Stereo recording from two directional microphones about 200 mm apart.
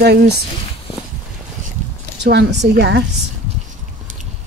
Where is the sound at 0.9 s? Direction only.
30° left (ahead or behind).